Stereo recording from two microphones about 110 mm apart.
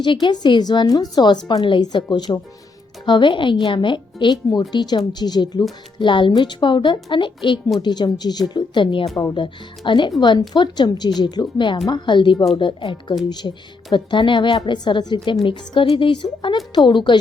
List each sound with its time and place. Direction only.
0.0 s a woman's voice: 45° left (ahead or behind)